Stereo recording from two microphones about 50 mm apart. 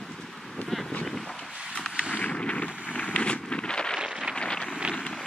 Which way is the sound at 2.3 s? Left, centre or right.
Left.